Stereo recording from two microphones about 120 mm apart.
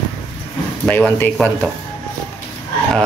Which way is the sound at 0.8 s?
10° left (ahead or behind).